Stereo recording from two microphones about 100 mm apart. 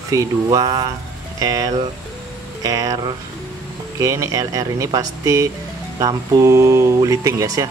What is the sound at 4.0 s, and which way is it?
Speech, 30° right (ahead or behind).